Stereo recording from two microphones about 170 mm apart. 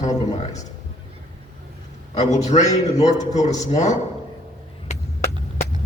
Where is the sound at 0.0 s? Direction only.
45° left (ahead or behind).